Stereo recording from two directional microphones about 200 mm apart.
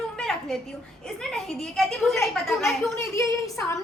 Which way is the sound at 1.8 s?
Centre (ahead or behind).